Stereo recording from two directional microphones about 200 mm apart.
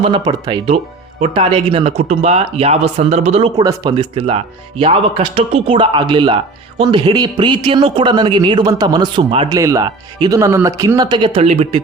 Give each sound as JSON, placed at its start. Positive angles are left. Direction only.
{"t": 0.0, "sound": "speech", "side_deg": -25}
{"t": 3.6, "sound": "speech", "side_deg": -20}